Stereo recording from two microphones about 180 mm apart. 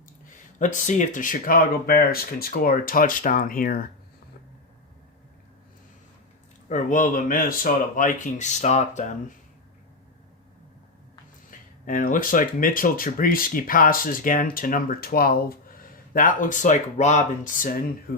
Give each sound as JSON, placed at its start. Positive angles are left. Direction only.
{"t": 0.3, "sound": "speech", "side_deg": 45}
{"t": 6.7, "sound": "speech", "side_deg": 45}
{"t": 11.5, "sound": "speech", "side_deg": 50}